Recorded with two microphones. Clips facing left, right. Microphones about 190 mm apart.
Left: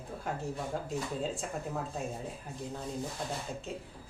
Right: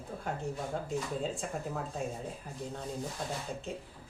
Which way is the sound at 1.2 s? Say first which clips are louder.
Even; centre (ahead or behind).